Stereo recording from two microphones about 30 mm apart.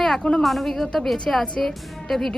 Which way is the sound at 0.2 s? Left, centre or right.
Left.